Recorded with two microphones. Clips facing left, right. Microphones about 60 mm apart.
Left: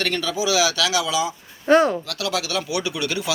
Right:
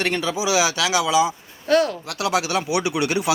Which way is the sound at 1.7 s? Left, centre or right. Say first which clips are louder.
Left 3 dB; left.